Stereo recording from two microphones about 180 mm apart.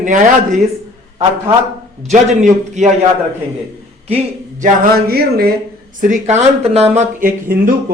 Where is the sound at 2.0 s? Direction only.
40° right (ahead or behind).